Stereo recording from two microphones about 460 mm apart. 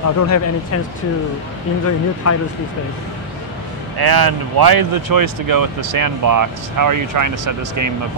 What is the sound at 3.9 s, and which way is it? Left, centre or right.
Speech, right.